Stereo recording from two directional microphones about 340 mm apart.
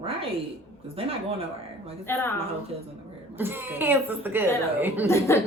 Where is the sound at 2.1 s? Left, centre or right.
Centre.